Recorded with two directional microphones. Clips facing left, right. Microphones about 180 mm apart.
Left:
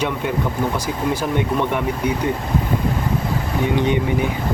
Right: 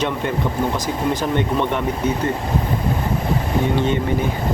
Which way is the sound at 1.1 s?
10° left (ahead or behind).